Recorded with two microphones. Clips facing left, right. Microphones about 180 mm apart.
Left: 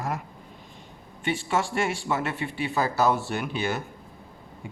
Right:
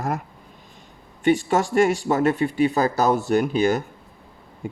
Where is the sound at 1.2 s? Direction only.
40° right (ahead or behind).